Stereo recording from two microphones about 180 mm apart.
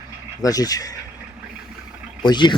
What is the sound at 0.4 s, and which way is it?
Speech, 20° left (ahead or behind).